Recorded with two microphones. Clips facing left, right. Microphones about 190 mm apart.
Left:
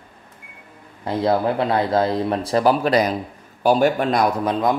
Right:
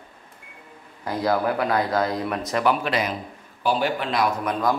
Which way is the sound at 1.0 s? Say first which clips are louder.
Left 3 dB; 25° left (ahead or behind).